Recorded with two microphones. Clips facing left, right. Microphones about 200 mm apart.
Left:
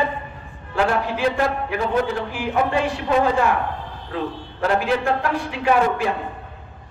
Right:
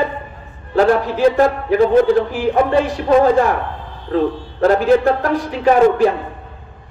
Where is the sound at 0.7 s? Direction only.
40° right (ahead or behind).